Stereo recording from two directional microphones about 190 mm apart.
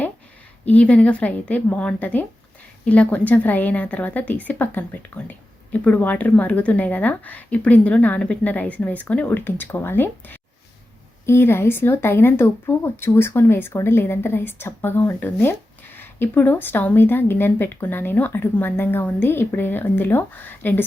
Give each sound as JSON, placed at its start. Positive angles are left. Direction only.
{"t": 0.6, "sound": "speech", "side_deg": 5}